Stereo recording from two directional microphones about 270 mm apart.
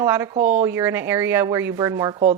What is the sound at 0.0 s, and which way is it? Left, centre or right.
Speech, centre.